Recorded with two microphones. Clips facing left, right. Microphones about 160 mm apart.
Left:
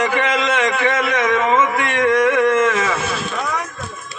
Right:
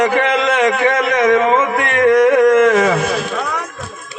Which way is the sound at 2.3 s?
35° right (ahead or behind).